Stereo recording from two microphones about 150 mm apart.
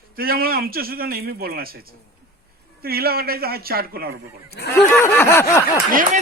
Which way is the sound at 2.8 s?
90° right.